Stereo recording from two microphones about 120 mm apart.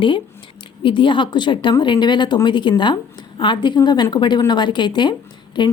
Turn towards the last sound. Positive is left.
turn(degrees=40)  # may be behind; listen again after turning